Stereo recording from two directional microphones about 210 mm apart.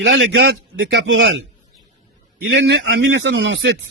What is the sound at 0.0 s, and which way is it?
A man's voice, 60° right (ahead or behind).